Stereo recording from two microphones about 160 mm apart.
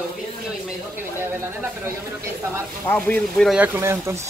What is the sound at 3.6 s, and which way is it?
Speech, 15° right (ahead or behind).